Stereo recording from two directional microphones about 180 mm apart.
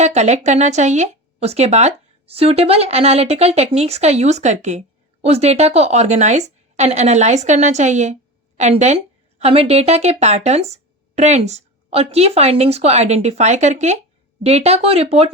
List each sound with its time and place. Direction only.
0.0 s speech: 40° right (ahead or behind)